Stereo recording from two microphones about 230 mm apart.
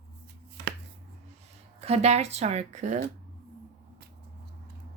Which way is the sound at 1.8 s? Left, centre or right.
Right.